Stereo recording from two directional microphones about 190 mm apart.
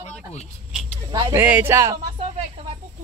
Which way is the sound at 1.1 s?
15° right (ahead or behind).